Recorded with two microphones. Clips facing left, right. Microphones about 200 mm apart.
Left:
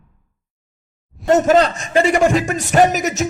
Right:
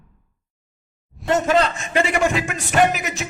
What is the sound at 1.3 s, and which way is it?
A man's voice, 45° left (ahead or behind).